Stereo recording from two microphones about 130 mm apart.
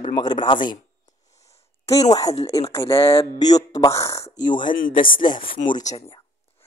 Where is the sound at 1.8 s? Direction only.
30° left (ahead or behind).